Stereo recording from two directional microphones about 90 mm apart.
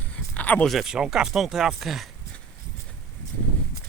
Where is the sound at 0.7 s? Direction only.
5° right (ahead or behind).